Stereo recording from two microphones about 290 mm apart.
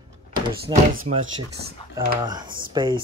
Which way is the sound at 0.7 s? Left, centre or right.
Centre.